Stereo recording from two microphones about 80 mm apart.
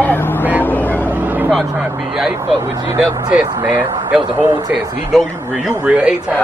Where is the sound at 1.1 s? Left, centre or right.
Right.